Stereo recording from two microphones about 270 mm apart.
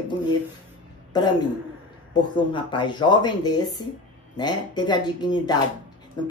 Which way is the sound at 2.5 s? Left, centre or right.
Centre.